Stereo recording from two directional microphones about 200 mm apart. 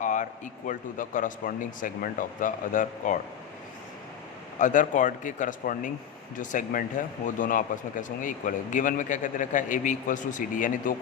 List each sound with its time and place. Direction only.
0.0 s speech: 40° left (ahead or behind)
4.5 s speech: 40° left (ahead or behind)